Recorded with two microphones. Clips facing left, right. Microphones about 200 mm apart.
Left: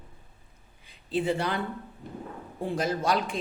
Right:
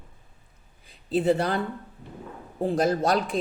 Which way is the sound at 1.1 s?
40° right (ahead or behind).